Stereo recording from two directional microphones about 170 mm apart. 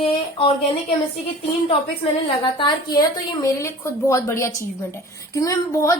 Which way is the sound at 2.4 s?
30° left (ahead or behind).